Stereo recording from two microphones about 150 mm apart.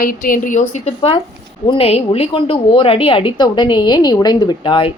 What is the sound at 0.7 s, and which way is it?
A woman's voice, 40° left (ahead or behind).